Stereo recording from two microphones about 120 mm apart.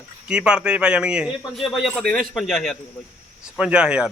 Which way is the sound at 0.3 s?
5° right (ahead or behind).